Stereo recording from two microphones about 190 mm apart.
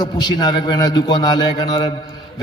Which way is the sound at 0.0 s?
20° left (ahead or behind).